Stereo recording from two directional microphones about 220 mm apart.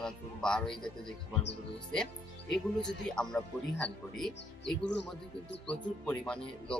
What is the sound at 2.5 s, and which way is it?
Speech, 5° left (ahead or behind).